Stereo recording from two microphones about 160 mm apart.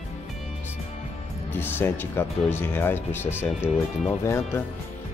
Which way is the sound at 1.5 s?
15° left (ahead or behind).